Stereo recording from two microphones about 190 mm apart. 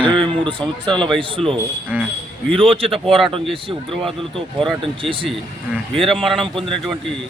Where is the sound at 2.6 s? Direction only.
30° right (ahead or behind).